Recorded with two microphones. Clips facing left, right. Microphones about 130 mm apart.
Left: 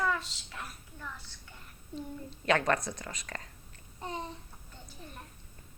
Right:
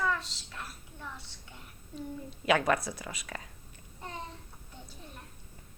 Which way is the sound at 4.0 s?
20° left (ahead or behind).